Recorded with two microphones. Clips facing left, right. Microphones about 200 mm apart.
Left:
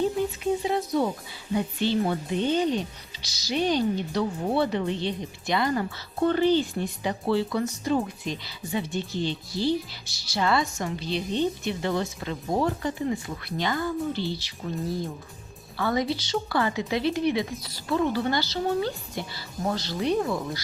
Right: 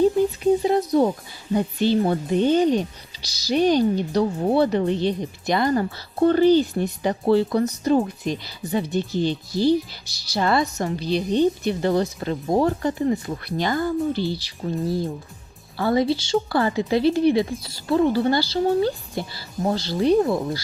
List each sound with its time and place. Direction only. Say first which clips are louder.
0.6 s speech: right 6 dB; 45° right (ahead or behind)